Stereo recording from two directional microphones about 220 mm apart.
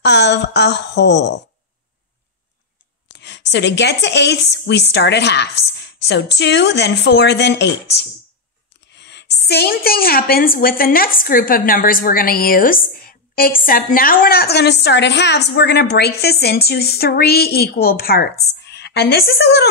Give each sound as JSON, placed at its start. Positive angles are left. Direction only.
{"t": 0.0, "sound": "a woman's voice", "side_deg": 50}
{"t": 3.2, "sound": "a woman's voice", "side_deg": 50}